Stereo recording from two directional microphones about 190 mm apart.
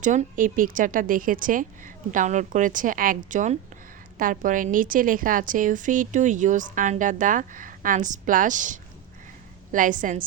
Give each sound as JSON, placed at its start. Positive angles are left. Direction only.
{"t": 0.0, "sound": "a woman's voice", "side_deg": -40}